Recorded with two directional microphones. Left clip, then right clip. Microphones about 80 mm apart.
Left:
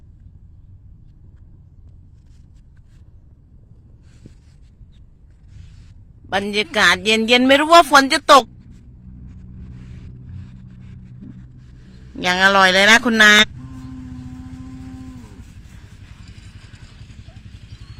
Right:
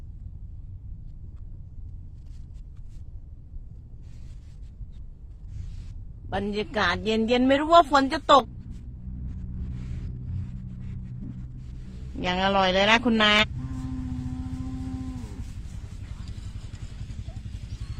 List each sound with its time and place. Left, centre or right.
6.5 s a woman's voice: left
8.6 s vehicle: centre
12.2 s speech: left
13.6 s vehicle: centre
14.4 s vehicle: centre
15.1 s a sound: centre
16.0 s vehicle: right